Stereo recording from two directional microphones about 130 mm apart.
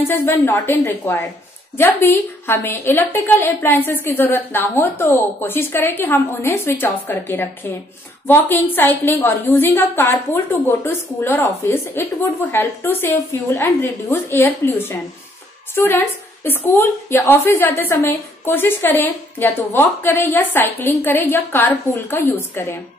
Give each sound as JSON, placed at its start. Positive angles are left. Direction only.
{"t": 0.2, "sound": "a woman's voice", "side_deg": 20}